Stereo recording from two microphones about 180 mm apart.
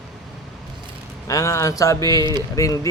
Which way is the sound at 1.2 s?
15° left (ahead or behind).